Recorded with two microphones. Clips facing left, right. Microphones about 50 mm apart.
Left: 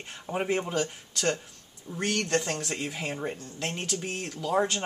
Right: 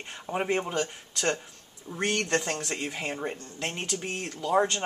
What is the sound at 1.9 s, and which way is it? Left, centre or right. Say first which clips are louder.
Speech: right 1 dB; centre.